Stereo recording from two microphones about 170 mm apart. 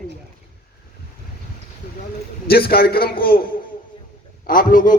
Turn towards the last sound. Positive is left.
turn(degrees=50)  # may be behind; listen again after turning